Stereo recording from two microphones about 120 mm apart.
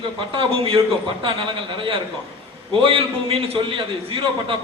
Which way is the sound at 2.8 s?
50° right (ahead or behind).